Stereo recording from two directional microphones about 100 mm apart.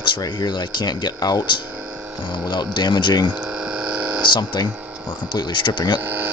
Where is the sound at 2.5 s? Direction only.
50° left (ahead or behind).